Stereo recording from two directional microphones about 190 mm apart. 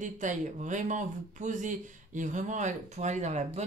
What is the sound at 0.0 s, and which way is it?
Speech, 40° right (ahead or behind).